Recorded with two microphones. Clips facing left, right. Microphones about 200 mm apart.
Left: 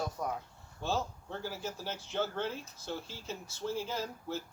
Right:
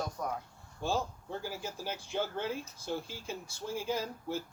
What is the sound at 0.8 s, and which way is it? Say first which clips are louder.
Speech: right 1 dB; 10° right (ahead or behind).